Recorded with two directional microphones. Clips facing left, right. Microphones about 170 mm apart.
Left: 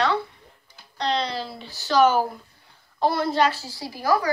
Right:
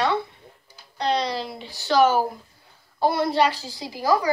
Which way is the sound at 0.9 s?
10° right (ahead or behind).